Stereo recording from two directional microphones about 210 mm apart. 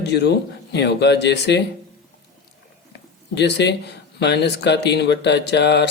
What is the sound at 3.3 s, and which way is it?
Speech, 55° left (ahead or behind).